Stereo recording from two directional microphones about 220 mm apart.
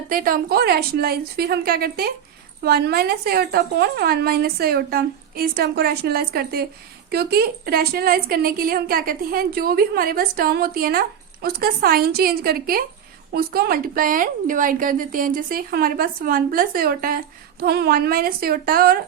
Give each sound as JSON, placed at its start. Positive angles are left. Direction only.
{"t": 0.1, "sound": "a woman's voice", "side_deg": -40}